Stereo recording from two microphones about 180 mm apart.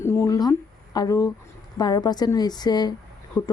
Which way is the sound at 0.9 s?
20° left (ahead or behind).